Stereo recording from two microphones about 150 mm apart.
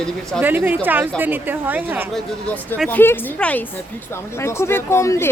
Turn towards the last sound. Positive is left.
turn(degrees=20)  # may be behind; listen again after turning